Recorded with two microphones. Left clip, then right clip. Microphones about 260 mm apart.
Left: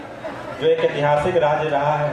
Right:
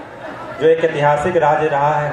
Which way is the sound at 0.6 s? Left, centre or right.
Right.